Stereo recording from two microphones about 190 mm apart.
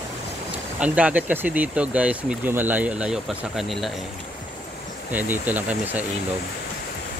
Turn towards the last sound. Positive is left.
turn(degrees=-10)  # may be behind; listen again after turning